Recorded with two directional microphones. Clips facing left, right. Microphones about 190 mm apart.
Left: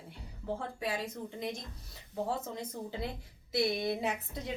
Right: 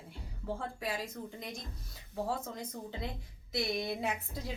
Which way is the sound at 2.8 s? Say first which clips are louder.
Left 2 dB; centre (ahead or behind).